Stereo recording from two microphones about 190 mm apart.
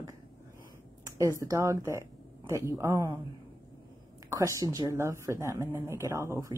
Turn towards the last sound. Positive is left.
turn(degrees=-15)  # may be behind; listen again after turning